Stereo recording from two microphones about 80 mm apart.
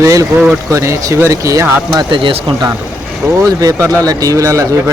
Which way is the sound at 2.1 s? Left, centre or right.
Right.